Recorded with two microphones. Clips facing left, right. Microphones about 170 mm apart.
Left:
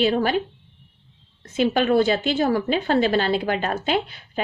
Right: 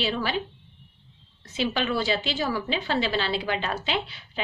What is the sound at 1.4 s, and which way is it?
A woman's voice, 50° left (ahead or behind).